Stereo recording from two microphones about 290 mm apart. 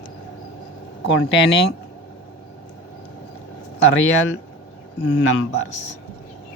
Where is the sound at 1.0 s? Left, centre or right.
Left.